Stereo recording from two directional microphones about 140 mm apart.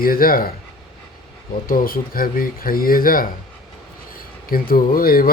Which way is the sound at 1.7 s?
90° left.